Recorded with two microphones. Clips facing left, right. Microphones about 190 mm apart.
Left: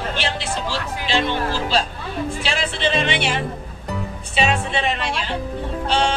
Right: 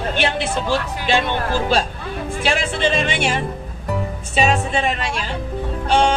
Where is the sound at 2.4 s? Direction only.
50° right (ahead or behind).